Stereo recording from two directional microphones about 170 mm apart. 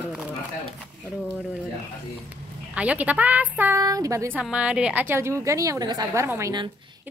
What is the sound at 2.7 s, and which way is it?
A woman's voice, 10° right (ahead or behind).